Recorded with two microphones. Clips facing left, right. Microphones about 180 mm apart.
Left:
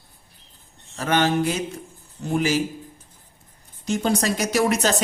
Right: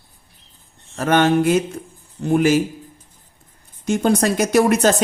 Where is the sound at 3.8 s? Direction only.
55° right (ahead or behind).